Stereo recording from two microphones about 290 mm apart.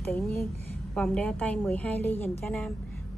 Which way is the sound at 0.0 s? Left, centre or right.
Centre.